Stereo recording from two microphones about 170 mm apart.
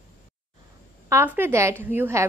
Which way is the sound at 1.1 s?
10° right (ahead or behind).